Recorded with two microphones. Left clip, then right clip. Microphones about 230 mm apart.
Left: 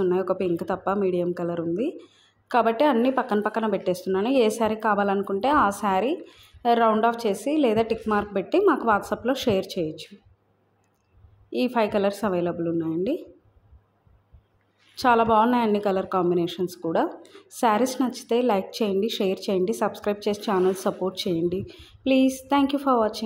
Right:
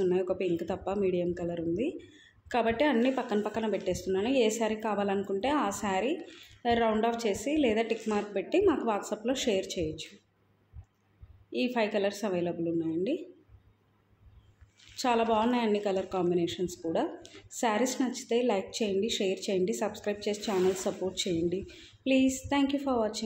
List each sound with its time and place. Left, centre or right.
0.0 s a woman's voice: centre
11.5 s a woman's voice: left
15.0 s a woman's voice: left